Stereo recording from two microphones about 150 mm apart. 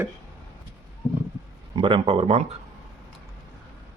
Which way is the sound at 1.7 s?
35° right (ahead or behind).